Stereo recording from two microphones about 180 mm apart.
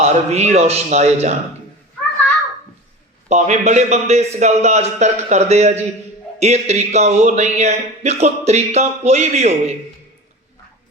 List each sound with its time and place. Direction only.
0.0 s speech: 35° right (ahead or behind)
3.2 s speech: 40° right (ahead or behind)